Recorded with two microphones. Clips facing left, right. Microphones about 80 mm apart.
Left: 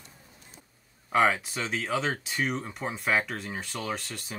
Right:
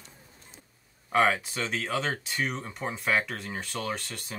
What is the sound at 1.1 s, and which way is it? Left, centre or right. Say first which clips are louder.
Speech: even; centre.